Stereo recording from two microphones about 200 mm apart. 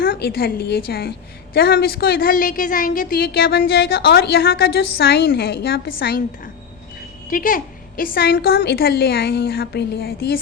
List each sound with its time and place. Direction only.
0.0 s a woman's voice: 50° left (ahead or behind)